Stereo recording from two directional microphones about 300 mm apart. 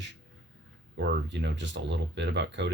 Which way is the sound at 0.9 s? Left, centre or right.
Right.